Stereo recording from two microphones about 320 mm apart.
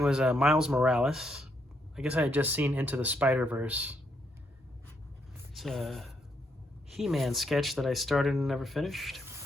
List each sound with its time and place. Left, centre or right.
0.0 s speech: centre
5.5 s speech: centre